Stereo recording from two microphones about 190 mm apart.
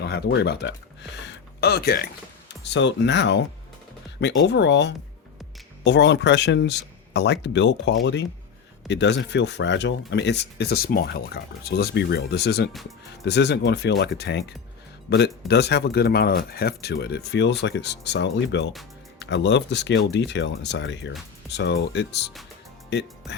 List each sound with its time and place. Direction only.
0.0 s speech: 60° left (ahead or behind)
2.6 s speech: 65° left (ahead or behind)